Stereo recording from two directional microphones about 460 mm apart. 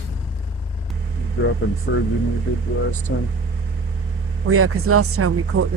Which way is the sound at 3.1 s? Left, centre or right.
Left.